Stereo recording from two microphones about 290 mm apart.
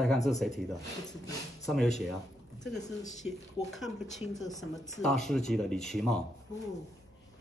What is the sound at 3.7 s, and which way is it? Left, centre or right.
Speech, centre.